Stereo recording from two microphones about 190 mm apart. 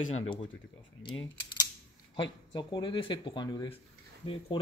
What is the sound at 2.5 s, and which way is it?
Speech, 25° left (ahead or behind).